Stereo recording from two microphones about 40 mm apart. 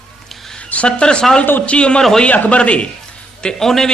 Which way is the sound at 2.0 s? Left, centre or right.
Centre.